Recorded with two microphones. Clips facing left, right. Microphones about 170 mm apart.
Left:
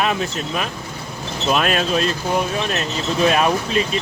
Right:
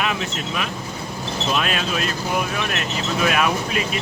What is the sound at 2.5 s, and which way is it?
Speech, 30° left (ahead or behind).